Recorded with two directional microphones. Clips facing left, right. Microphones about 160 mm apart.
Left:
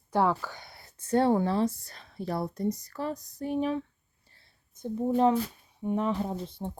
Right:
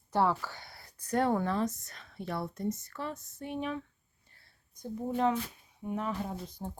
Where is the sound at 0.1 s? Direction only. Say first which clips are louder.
Left 3 dB; 15° left (ahead or behind); by 3.8 s 35° left (ahead or behind).